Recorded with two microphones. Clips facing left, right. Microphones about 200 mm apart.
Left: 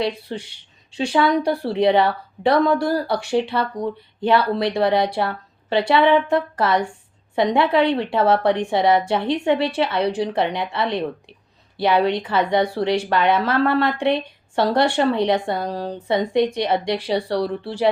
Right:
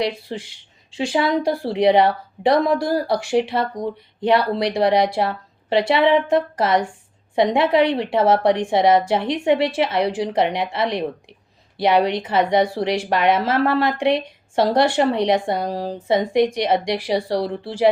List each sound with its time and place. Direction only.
0.3 s speech: 90° right
1.1 s speech: 25° right (ahead or behind)